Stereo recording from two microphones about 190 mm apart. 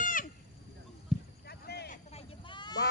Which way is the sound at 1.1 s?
Centre (ahead or behind).